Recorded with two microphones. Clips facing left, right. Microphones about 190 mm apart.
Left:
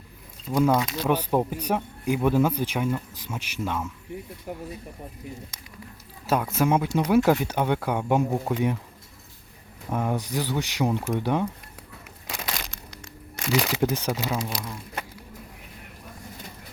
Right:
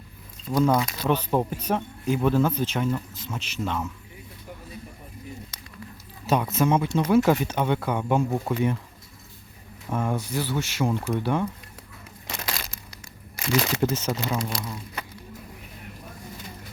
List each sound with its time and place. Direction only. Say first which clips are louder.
0.5 s speech: even; 10° left (ahead or behind)
6.2 s speech: right 1 dB; 5° left (ahead or behind)
9.9 s speech: even; 15° left (ahead or behind)
12.5 s a sound: left 1 dB; 5° right (ahead or behind)
13.7 s speech: even; 10° left (ahead or behind)